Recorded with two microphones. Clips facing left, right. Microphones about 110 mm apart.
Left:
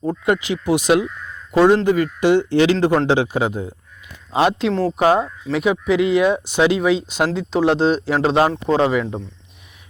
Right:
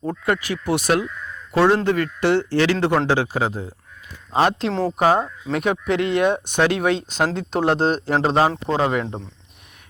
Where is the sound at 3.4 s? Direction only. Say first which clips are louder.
Left 2 dB; 35° right (ahead or behind).